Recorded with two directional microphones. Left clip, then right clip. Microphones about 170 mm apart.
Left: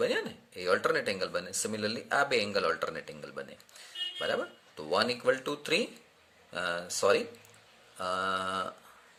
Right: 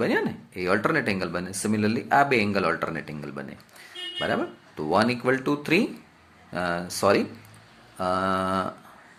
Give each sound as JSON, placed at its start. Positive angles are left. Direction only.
{"t": 0.0, "sound": "speech", "side_deg": 20}